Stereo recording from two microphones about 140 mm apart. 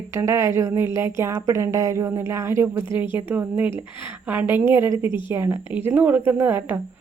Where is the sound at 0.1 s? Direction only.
20° right (ahead or behind).